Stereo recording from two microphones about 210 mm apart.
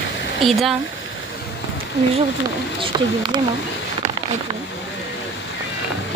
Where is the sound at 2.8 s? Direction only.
20° right (ahead or behind).